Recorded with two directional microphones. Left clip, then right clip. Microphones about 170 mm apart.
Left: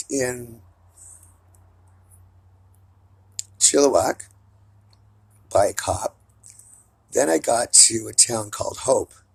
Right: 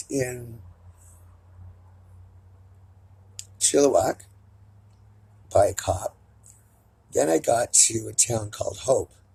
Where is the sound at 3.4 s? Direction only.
10° left (ahead or behind).